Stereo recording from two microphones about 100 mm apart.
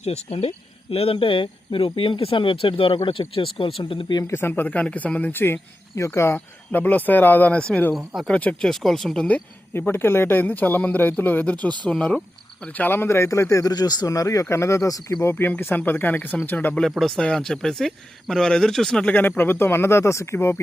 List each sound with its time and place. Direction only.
0.0 s speech: 90° left; by 4.0 s 65° left (ahead or behind)
4.1 s speech: 35° left (ahead or behind)
4.4 s speech: 20° left (ahead or behind)
7.9 s speech: 5° right (ahead or behind)
8.3 s speech: 15° left (ahead or behind)
8.6 s speech: 5° left (ahead or behind)
9.2 s speech: 15° left (ahead or behind)
16.8 s speech: centre (ahead or behind); by 20.6 s 25° left (ahead or behind)